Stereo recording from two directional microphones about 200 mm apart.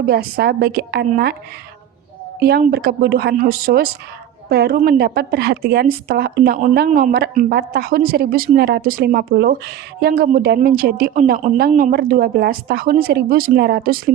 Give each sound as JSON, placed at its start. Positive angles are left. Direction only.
{"t": 0.0, "sound": "a woman's voice", "side_deg": -50}
{"t": 2.4, "sound": "a woman's voice", "side_deg": -50}